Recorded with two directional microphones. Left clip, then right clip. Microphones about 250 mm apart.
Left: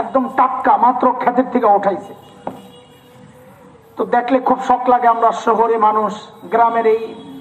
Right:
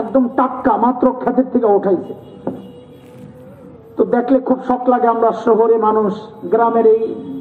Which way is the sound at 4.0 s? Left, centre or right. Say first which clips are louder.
Right 1 dB; left.